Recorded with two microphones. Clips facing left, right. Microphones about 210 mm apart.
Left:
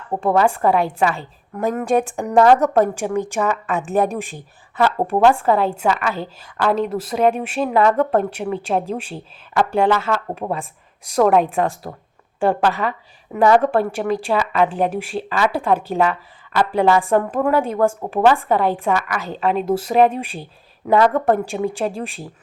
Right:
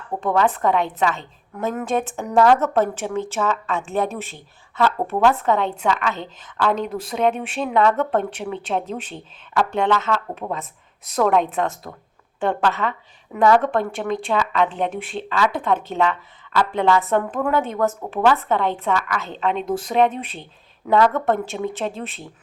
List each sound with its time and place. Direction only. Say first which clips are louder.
0.3 s a woman's voice: left 2 dB; 10° left (ahead or behind)
4.9 s a woman's voice: left 5 dB; 30° left (ahead or behind)
5.3 s a woman's voice: left 3 dB; 10° left (ahead or behind)